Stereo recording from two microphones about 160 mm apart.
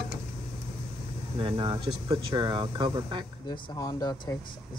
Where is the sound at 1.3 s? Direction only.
30° right (ahead or behind).